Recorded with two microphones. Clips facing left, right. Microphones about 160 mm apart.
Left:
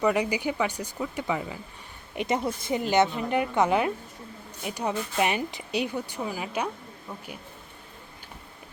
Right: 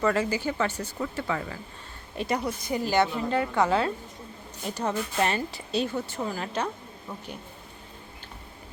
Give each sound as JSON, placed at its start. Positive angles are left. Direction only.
{"t": 0.0, "sound": "a woman's voice", "side_deg": 15}